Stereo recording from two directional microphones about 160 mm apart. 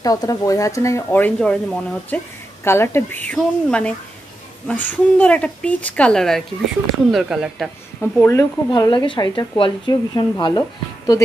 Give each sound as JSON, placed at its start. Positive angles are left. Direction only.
{"t": 0.0, "sound": "a woman's voice", "side_deg": 20}
{"t": 8.0, "sound": "a woman's voice", "side_deg": 15}
{"t": 8.6, "sound": "speech", "side_deg": 30}